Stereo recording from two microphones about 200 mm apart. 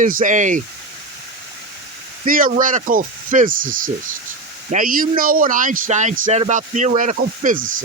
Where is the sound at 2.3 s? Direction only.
45° right (ahead or behind).